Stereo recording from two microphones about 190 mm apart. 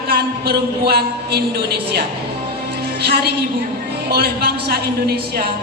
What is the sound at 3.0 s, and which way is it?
A man's voice, 55° right (ahead or behind).